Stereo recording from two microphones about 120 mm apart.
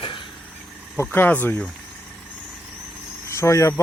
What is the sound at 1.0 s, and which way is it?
Speech, 15° left (ahead or behind).